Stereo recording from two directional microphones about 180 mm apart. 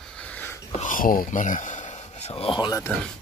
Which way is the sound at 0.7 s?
45° left (ahead or behind).